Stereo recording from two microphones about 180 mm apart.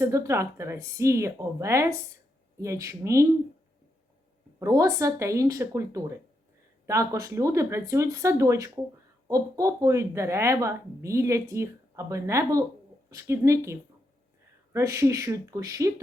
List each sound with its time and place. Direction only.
0.0 s speech: 15° right (ahead or behind)
4.6 s speech: 20° right (ahead or behind)